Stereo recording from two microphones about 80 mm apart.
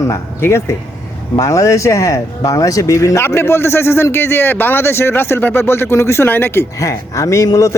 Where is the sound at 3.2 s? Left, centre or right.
Left.